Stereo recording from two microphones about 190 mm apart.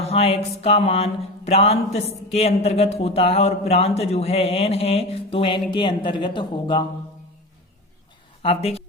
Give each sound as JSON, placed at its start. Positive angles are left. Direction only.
{"t": 0.1, "sound": "speech", "side_deg": 30}
{"t": 8.4, "sound": "speech", "side_deg": 30}